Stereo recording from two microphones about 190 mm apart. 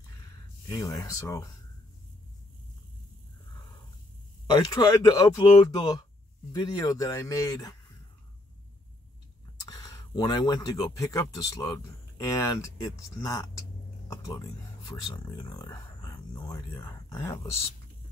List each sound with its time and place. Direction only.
0.7 s speech: 20° left (ahead or behind)
4.6 s speech: 20° left (ahead or behind)
9.7 s speech: 20° left (ahead or behind)
14.0 s a sound: 20° left (ahead or behind)
14.9 s speech: 20° left (ahead or behind)